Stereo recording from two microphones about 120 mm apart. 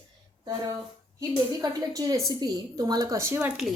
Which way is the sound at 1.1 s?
30° right (ahead or behind).